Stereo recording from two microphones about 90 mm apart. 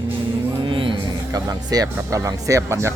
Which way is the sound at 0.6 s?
70° right (ahead or behind).